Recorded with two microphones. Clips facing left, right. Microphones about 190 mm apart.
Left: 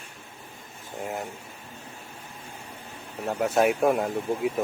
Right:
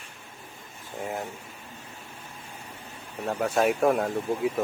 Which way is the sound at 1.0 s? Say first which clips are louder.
Even; centre (ahead or behind).